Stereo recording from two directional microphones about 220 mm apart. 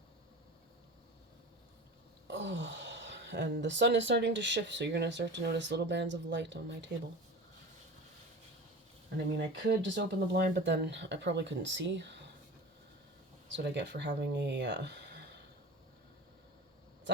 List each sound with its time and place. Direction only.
2.2 s speech: 55° right (ahead or behind)
9.1 s speech: 50° right (ahead or behind)
13.5 s speech: 50° right (ahead or behind)